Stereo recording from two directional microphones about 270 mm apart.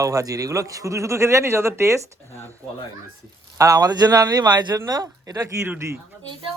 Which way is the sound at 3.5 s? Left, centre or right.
Centre.